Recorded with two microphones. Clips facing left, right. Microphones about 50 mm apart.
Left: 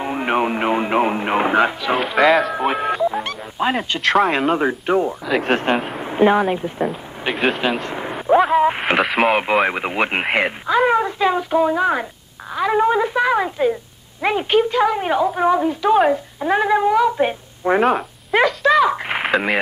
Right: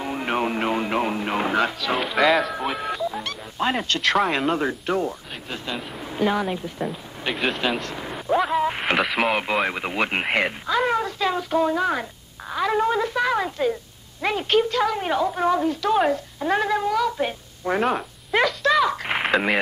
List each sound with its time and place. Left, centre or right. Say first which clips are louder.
0.0 s music: left 5 dB; left
2.0 s speech: left 4 dB; centre
2.5 s music: left 7 dB; left
3.5 s a woman's voice: left 3 dB; centre
5.4 s speech: left 11 dB; left
7.3 s a woman's voice: left 5 dB; centre
7.9 s a sound: left 7 dB; left
8.8 s a woman's voice: left 5 dB; centre
17.8 s speech: left 6 dB; centre